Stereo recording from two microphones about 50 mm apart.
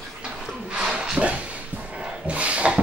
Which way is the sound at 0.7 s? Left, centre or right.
Centre.